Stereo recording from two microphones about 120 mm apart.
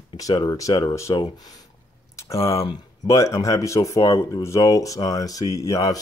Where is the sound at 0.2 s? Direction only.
35° left (ahead or behind).